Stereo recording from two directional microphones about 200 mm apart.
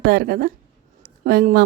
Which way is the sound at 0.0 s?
50° right (ahead or behind).